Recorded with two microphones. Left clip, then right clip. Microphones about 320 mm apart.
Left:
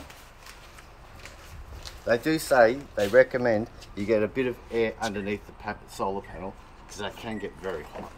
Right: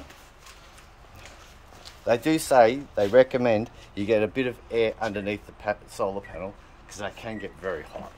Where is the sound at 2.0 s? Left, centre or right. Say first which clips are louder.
Right 2 dB; right.